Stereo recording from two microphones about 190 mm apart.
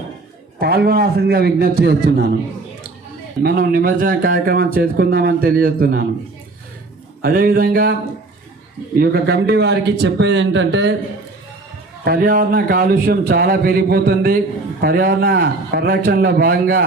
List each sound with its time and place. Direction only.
0.6 s speech: 55° right (ahead or behind)
3.4 s speech: 50° right (ahead or behind)
7.2 s speech: 50° right (ahead or behind)
9.0 s a man's voice: 55° right (ahead or behind)
12.0 s speech: 50° right (ahead or behind)